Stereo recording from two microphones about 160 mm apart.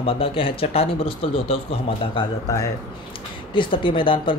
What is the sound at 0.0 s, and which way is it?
Speech, 35° left (ahead or behind).